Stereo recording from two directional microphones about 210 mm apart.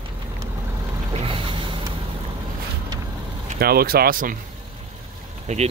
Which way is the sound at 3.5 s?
45° right (ahead or behind).